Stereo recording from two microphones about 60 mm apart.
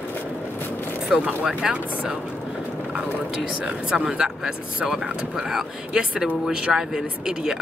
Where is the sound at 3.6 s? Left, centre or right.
Centre.